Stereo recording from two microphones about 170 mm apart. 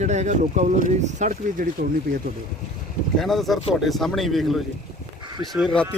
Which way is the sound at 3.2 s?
Centre (ahead or behind).